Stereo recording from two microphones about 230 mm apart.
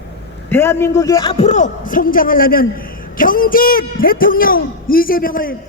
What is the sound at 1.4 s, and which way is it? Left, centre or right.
A man's voice, left.